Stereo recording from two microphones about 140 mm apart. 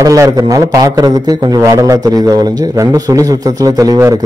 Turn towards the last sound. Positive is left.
turn(degrees=-25)  # may be behind; listen again after turning